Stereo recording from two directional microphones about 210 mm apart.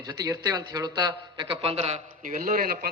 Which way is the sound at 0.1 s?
20° right (ahead or behind).